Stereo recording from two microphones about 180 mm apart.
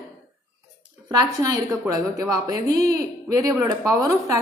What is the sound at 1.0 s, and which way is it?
A woman's voice, 20° right (ahead or behind).